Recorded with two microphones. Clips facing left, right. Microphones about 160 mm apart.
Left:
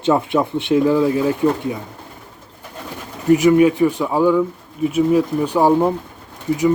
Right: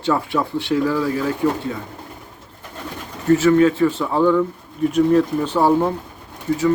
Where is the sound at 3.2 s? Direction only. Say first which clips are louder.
Left 2 dB; 15° left (ahead or behind).